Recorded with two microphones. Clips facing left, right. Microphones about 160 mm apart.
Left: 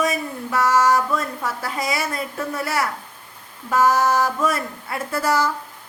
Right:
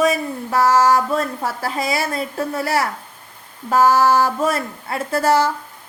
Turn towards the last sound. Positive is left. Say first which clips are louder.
# right 4 dB
turn(degrees=-30)  # may be behind; listen again after turning